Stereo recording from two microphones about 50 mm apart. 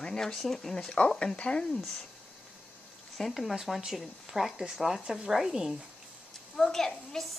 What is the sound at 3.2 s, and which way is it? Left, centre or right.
Speech, centre.